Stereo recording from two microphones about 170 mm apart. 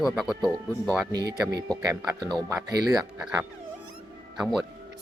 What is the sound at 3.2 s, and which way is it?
Speech, 10° right (ahead or behind).